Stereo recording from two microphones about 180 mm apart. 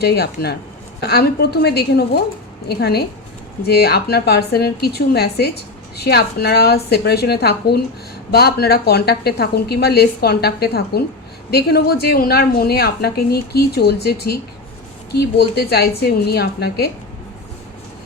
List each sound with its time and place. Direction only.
0.0 s a woman's voice: 65° left (ahead or behind)